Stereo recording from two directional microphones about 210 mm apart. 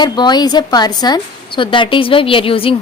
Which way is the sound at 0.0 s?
20° left (ahead or behind).